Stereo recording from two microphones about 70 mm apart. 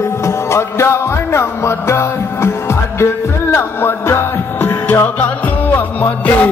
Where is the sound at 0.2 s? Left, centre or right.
Left.